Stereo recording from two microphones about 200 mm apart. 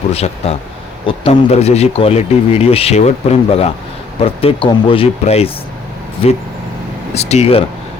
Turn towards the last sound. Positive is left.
turn(degrees=30)  # may be behind; listen again after turning